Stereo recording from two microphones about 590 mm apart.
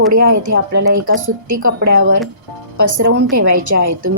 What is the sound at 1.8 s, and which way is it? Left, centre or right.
Speech, centre.